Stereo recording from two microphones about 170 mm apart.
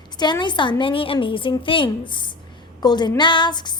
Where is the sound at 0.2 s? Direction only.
25° left (ahead or behind).